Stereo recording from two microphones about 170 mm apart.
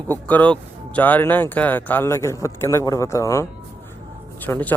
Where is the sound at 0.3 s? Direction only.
10° left (ahead or behind).